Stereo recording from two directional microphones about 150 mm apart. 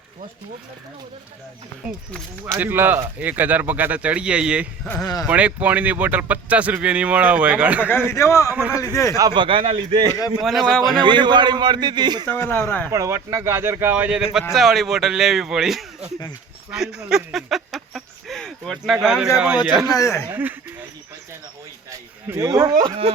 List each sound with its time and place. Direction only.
2.4 s speech: 15° right (ahead or behind)
7.9 s a man's voice: 15° left (ahead or behind)
8.5 s speech: 10° right (ahead or behind)
8.8 s a man's voice: 20° left (ahead or behind)
9.1 s speech: 30° right (ahead or behind)
10.4 s speech: centre (ahead or behind)
11.0 s a man's voice: 30° right (ahead or behind)
12.3 s speech: 15° left (ahead or behind)
12.9 s speech: 20° right (ahead or behind)
19.9 s a man's voice: 20° left (ahead or behind)
20.3 s a sound: 10° right (ahead or behind)
21.8 s a sound: 20° right (ahead or behind)